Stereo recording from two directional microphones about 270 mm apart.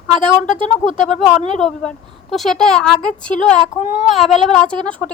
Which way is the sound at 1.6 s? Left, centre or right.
Centre.